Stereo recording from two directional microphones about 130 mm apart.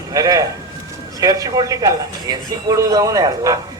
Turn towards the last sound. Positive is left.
turn(degrees=-25)  # may be behind; listen again after turning